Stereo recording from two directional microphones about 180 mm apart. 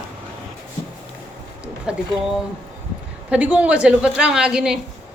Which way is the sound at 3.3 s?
10° right (ahead or behind).